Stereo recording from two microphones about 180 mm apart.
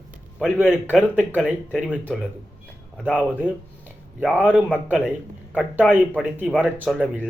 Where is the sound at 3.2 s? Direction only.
10° right (ahead or behind).